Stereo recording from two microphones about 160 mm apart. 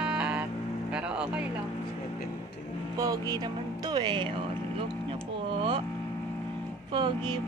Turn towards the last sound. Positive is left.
turn(degrees=-30)  # may be behind; listen again after turning